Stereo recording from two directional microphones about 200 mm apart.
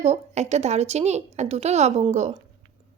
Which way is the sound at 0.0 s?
35° right (ahead or behind).